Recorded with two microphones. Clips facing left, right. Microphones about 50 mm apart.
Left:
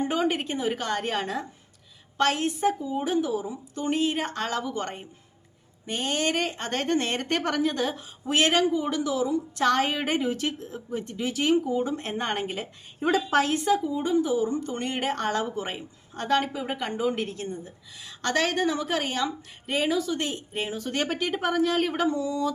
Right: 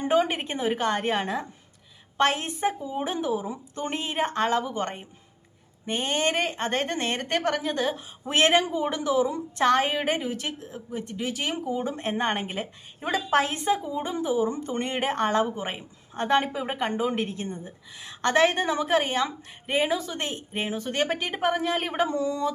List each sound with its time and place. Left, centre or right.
0.1 s a woman's voice: centre
8.2 s a woman's voice: right; by 11.5 s centre
11.7 s a woman's voice: right
22.1 s a woman's voice: right